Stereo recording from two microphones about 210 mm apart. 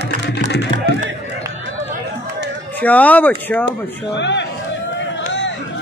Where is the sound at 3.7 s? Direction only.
55° left (ahead or behind).